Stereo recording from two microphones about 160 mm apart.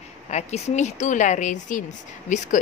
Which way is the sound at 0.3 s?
45° left (ahead or behind).